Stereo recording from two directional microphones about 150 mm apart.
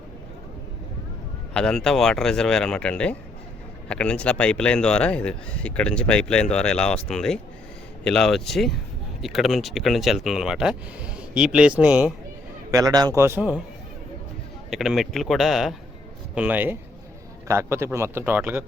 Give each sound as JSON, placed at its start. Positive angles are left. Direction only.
{"t": 1.5, "sound": "speech", "side_deg": 5}
{"t": 12.7, "sound": "a man's voice", "side_deg": -25}
{"t": 14.7, "sound": "a man's voice", "side_deg": 0}